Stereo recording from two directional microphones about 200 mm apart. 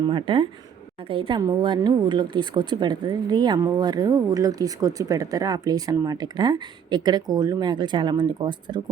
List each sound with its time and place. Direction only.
0.0 s a woman's voice: 25° right (ahead or behind)